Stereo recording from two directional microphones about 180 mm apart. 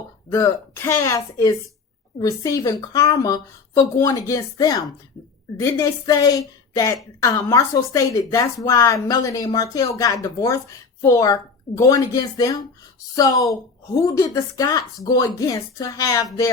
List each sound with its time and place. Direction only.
0.3 s speech: 15° left (ahead or behind)